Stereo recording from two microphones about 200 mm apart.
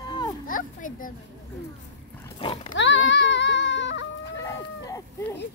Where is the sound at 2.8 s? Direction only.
65° left (ahead or behind).